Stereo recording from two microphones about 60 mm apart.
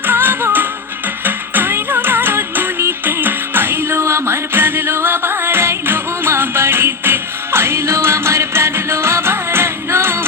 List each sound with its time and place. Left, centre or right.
0.1 s music: right